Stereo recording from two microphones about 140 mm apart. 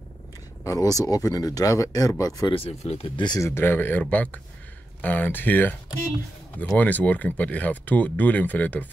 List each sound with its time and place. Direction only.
0.7 s speech: 25° left (ahead or behind)
2.5 s speech: 45° left (ahead or behind)
3.2 s speech: 30° left (ahead or behind)
3.4 s speech: 15° left (ahead or behind)